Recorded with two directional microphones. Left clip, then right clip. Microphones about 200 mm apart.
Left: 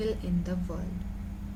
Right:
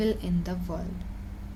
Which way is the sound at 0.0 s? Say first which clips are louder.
Right 3 dB; 55° right (ahead or behind).